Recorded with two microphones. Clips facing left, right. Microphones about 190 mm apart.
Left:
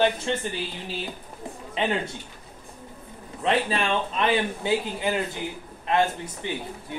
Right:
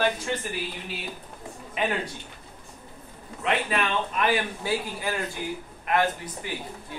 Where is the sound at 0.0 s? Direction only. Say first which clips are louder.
Left 3 dB; 25° left (ahead or behind).